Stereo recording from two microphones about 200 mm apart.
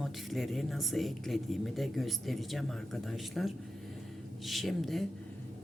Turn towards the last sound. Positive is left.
turn(degrees=0)  # may be behind; listen again after turning